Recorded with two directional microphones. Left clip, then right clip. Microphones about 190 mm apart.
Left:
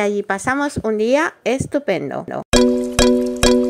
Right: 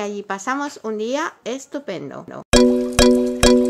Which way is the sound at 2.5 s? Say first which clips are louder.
Right 1 dB; centre (ahead or behind).